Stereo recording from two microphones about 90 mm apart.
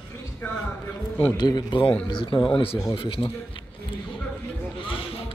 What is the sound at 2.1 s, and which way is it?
A man's voice, 65° left (ahead or behind).